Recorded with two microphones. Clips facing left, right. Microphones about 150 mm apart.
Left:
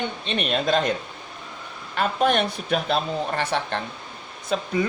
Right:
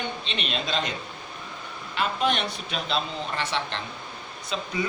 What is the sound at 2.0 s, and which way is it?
Speech, 50° left (ahead or behind).